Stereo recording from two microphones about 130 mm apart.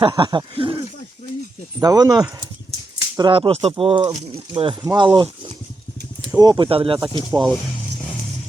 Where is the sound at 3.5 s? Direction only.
55° right (ahead or behind).